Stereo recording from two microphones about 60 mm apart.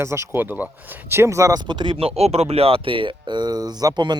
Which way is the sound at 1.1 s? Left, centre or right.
Right.